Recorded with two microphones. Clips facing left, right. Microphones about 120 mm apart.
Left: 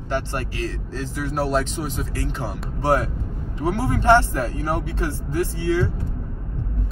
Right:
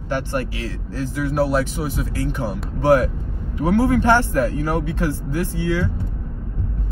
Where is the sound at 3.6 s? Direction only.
15° right (ahead or behind).